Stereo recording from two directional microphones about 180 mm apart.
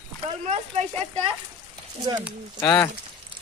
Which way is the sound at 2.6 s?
10° left (ahead or behind).